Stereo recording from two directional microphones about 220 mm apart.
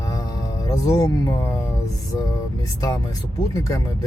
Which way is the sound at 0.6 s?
15° left (ahead or behind).